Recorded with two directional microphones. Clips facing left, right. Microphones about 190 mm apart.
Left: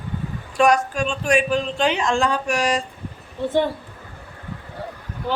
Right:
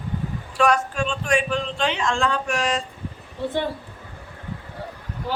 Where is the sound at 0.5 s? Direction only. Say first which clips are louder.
Left 3 dB; 10° left (ahead or behind).